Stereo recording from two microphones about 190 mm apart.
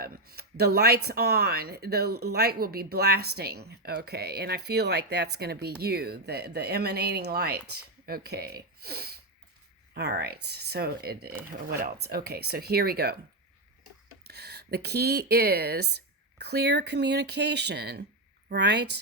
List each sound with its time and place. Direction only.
0.0 s speech: 55° right (ahead or behind)
14.3 s speech: 60° right (ahead or behind)